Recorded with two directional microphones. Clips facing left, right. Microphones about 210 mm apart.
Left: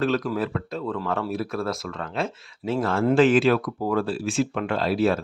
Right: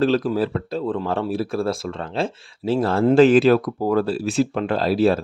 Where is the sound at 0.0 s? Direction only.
30° right (ahead or behind).